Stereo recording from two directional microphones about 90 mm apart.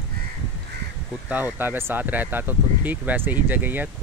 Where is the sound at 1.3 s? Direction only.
20° right (ahead or behind).